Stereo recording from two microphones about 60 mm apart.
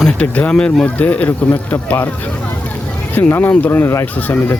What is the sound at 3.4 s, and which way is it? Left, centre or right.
Speech, left.